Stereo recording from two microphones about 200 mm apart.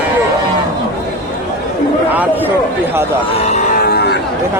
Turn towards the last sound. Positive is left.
turn(degrees=55)  # may be behind; listen again after turning